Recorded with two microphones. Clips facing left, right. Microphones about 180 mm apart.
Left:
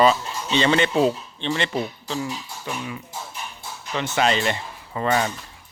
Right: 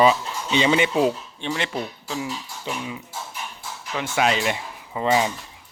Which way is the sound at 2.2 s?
15° right (ahead or behind).